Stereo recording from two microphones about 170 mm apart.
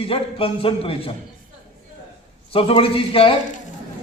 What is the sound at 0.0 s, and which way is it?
A man's voice, 35° left (ahead or behind).